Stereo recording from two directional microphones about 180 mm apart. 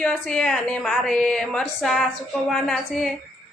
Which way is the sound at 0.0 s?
5° left (ahead or behind).